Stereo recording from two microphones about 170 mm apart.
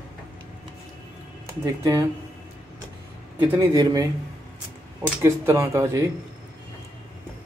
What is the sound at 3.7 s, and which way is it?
Speech, 20° right (ahead or behind).